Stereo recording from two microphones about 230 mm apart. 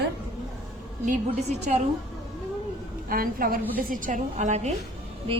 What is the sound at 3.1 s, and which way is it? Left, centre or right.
A woman's voice, right.